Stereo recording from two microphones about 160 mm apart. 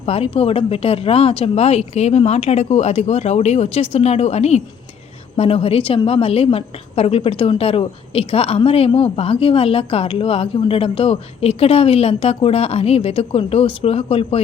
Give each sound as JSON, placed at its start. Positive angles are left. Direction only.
{"t": 0.0, "sound": "a woman's voice", "side_deg": 40}